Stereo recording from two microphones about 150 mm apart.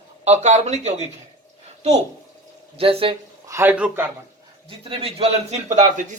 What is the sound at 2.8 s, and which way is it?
Speech, 40° right (ahead or behind).